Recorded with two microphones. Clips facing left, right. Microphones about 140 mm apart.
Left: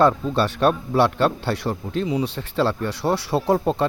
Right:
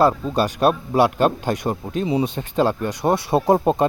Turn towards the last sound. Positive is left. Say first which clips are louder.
# right 3 dB
turn(degrees=-20)  # may be behind; listen again after turning